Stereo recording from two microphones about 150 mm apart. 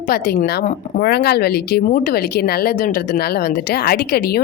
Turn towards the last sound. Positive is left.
turn(degrees=90)